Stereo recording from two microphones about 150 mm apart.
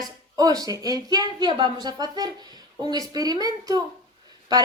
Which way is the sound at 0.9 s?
25° right (ahead or behind).